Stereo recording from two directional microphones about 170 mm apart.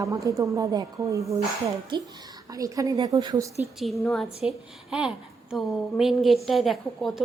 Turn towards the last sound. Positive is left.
turn(degrees=0)  # may be behind; listen again after turning